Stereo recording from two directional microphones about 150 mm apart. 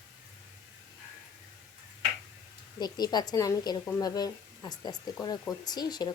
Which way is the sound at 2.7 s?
30° left (ahead or behind).